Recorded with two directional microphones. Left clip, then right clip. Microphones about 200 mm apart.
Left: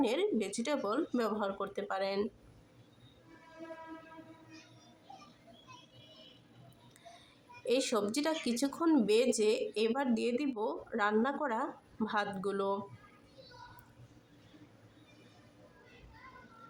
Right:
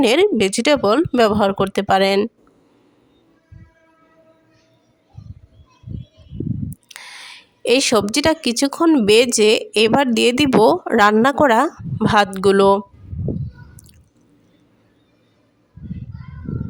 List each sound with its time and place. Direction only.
0.0 s speech: 50° right (ahead or behind)
6.9 s speech: 50° right (ahead or behind)